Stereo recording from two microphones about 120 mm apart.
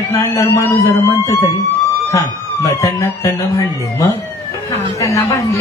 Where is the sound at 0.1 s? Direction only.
25° left (ahead or behind).